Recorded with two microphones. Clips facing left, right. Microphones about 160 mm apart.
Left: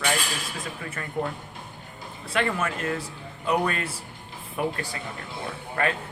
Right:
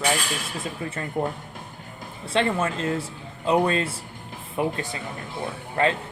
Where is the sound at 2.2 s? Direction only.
25° right (ahead or behind).